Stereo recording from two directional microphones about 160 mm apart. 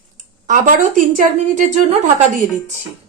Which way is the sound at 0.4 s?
55° right (ahead or behind).